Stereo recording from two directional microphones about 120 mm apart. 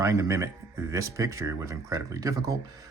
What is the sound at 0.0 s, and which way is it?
Speech, 25° right (ahead or behind).